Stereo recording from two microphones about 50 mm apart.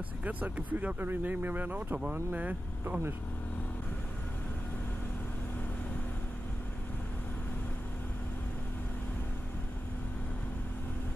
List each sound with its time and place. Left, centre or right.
0.2 s speech: right